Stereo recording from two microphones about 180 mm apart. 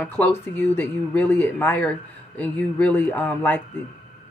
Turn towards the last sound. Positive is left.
turn(degrees=10)  # may be behind; listen again after turning